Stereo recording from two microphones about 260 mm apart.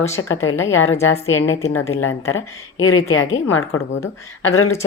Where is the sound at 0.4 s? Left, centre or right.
Left.